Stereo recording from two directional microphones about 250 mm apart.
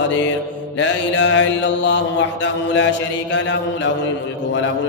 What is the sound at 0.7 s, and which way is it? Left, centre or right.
Mantra, left.